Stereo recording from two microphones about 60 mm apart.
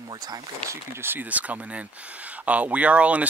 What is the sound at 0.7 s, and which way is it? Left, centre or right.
Speech, right.